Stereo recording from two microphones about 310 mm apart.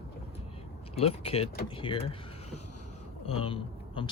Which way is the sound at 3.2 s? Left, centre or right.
Centre.